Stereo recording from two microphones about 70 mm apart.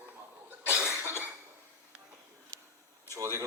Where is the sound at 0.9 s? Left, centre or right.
Right.